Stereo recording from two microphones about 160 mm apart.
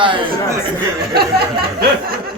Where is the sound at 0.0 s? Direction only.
30° right (ahead or behind).